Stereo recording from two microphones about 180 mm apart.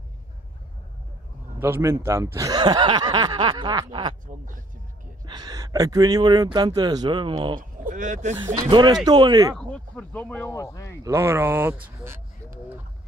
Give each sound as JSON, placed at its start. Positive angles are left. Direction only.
{"t": 1.6, "sound": "speech", "side_deg": -15}
{"t": 5.2, "sound": "speech", "side_deg": -25}
{"t": 7.8, "sound": "speech", "side_deg": -45}
{"t": 8.5, "sound": "speech", "side_deg": -20}
{"t": 9.6, "sound": "speech", "side_deg": 5}
{"t": 11.1, "sound": "speech", "side_deg": -15}